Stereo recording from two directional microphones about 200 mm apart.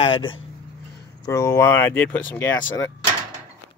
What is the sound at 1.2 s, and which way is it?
Speech, 15° left (ahead or behind).